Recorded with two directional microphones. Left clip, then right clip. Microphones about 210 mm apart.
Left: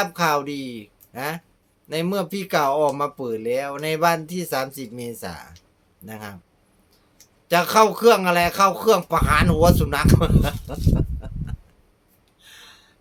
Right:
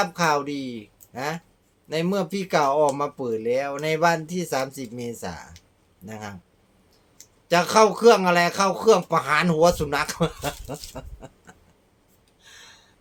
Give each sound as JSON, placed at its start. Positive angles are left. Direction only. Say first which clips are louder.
{"t": 0.0, "sound": "speech", "louder": "left 1 dB", "side_deg": 5}
{"t": 7.4, "sound": "speech", "louder": "left 1 dB", "side_deg": 5}
{"t": 10.9, "sound": "oink", "louder": "left 10 dB", "side_deg": 0}
{"t": 12.4, "sound": "gasp", "louder": "left 2 dB", "side_deg": 5}